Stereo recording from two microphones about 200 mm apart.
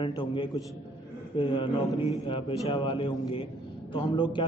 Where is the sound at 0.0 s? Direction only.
25° left (ahead or behind).